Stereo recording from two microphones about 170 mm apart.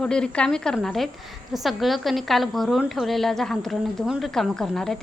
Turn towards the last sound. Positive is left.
turn(degrees=5)  # may be behind; listen again after turning